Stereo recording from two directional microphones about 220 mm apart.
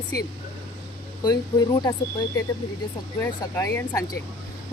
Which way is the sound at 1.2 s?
20° left (ahead or behind).